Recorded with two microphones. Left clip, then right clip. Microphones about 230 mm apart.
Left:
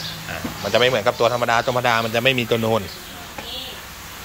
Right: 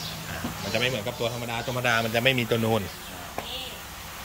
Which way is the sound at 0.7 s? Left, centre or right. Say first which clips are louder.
Left 11 dB; centre.